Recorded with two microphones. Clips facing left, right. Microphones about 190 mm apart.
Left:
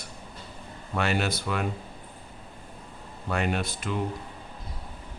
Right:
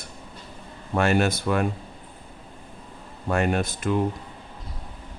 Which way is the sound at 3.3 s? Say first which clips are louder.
Right 5 dB; 45° right (ahead or behind).